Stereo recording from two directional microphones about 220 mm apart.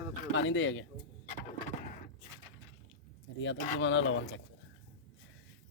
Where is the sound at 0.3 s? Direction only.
55° left (ahead or behind).